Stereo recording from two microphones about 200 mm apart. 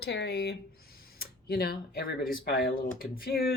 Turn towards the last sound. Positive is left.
turn(degrees=50)  # may be behind; listen again after turning